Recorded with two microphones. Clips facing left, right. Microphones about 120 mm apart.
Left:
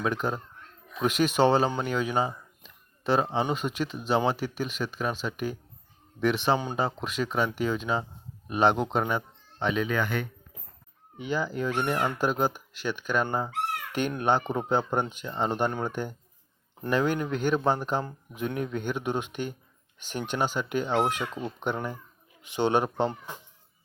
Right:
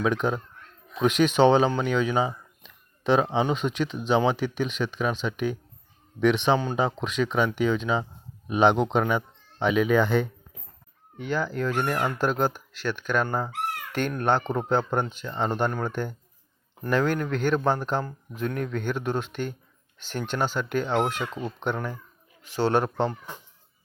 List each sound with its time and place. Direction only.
0.0 s speech: centre (ahead or behind)
1.8 s a sound: 5° left (ahead or behind)
3.4 s speech: 5° left (ahead or behind)
9.8 s speech: 20° right (ahead or behind)
11.2 s speech: 5° left (ahead or behind)